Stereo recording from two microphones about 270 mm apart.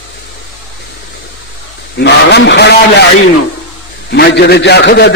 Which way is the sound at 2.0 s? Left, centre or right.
Left.